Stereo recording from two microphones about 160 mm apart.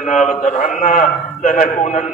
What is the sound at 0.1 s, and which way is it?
A man's voice, 50° left (ahead or behind).